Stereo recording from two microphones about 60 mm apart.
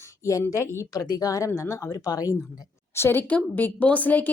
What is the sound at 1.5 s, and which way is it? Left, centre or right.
Speech, left.